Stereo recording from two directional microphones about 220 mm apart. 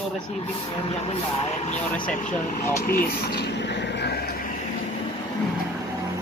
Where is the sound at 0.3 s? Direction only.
25° left (ahead or behind); by 4.4 s 45° left (ahead or behind).